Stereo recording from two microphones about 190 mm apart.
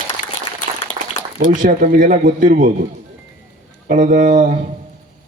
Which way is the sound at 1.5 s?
45° right (ahead or behind).